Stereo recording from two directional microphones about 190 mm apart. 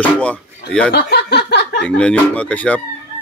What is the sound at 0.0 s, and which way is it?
Speech, 5° left (ahead or behind).